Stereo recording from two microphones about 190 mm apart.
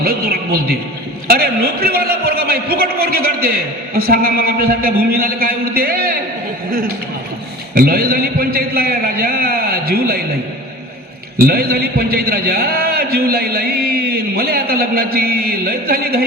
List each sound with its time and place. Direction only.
0.0 s a man's voice: 55° right (ahead or behind)
7.8 s a man's voice: 55° right (ahead or behind)
11.3 s a man's voice: 50° right (ahead or behind)